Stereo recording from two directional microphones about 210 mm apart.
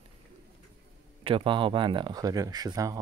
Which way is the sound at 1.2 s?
25° right (ahead or behind).